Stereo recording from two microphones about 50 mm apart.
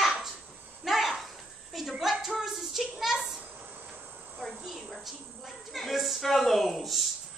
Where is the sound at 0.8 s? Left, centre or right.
Centre.